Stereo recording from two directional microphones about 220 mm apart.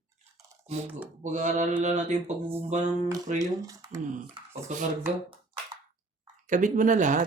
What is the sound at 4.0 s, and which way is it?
Speech, 35° right (ahead or behind).